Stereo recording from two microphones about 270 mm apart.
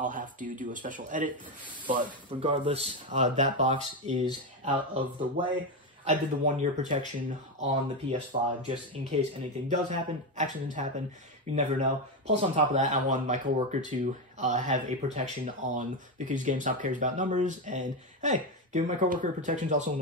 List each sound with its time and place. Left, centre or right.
0.0 s speech: right
2.4 s speech: centre